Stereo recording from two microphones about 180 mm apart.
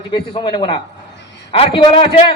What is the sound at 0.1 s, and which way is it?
A man's voice, 25° left (ahead or behind).